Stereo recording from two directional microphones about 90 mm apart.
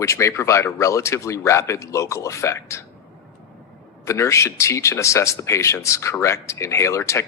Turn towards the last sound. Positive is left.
turn(degrees=30)  # may be behind; listen again after turning